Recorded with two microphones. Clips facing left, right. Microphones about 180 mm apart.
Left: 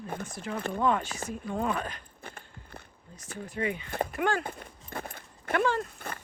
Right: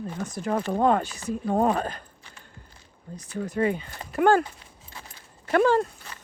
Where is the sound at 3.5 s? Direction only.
40° right (ahead or behind).